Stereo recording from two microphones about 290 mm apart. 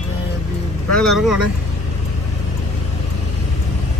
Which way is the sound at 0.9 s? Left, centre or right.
Centre.